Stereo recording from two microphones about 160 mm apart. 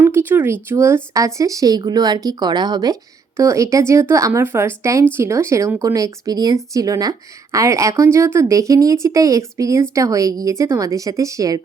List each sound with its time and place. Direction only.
0.0 s speech: 15° right (ahead or behind)